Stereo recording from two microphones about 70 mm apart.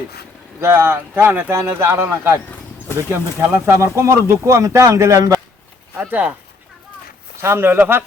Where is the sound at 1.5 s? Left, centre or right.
Right.